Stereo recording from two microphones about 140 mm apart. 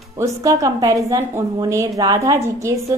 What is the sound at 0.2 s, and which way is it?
A woman's voice, 25° right (ahead or behind).